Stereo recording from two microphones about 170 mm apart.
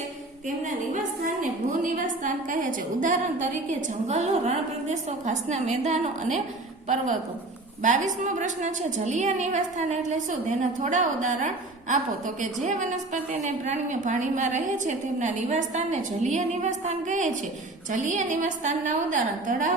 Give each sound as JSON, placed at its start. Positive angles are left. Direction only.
{"t": 1.4, "sound": "a woman's voice", "side_deg": -50}